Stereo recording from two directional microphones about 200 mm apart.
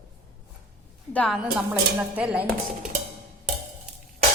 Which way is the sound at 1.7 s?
5° right (ahead or behind).